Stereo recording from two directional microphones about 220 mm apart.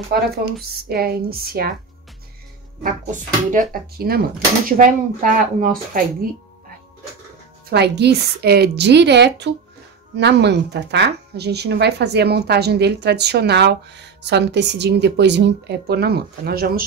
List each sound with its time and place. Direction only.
0.8 s speech: 45° right (ahead or behind)
2.8 s speech: 40° right (ahead or behind)
7.7 s speech: 50° right (ahead or behind)